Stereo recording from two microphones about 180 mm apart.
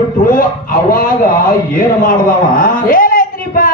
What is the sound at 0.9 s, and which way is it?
Speech, 55° left (ahead or behind).